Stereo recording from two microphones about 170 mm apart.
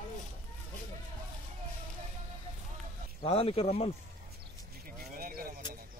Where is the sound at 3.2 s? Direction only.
35° left (ahead or behind).